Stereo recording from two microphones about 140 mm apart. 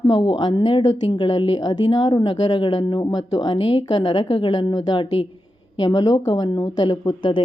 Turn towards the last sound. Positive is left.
turn(degrees=30)  # may be behind; listen again after turning